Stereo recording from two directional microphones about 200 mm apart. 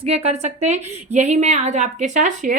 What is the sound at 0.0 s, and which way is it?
A woman's voice, 30° right (ahead or behind).